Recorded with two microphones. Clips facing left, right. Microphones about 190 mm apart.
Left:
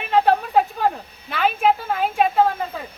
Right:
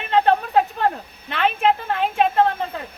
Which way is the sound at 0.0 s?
5° left (ahead or behind).